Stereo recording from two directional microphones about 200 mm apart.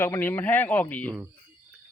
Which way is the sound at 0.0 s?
10° left (ahead or behind).